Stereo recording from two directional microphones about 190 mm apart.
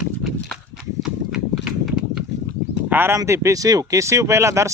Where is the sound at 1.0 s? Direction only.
Centre (ahead or behind).